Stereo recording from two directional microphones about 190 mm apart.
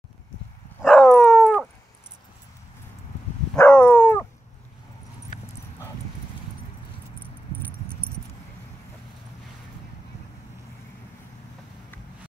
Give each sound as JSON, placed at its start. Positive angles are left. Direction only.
{"t": 0.8, "sound": "dog", "side_deg": 0}
{"t": 3.5, "sound": "dog", "side_deg": 5}